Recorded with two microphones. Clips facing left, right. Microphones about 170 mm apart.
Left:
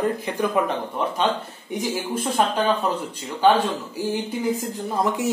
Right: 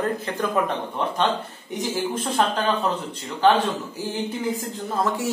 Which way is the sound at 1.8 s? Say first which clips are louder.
Even; 10° left (ahead or behind).